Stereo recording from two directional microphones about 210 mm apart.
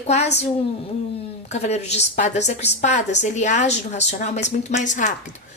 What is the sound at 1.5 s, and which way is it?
A woman's voice, 30° left (ahead or behind).